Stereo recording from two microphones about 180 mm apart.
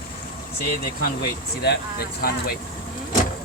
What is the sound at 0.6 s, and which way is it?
Speech, 55° left (ahead or behind).